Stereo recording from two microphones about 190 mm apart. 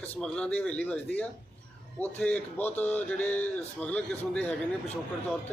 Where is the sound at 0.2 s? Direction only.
5° left (ahead or behind).